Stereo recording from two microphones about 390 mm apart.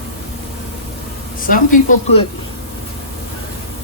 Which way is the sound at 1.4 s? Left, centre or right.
Centre.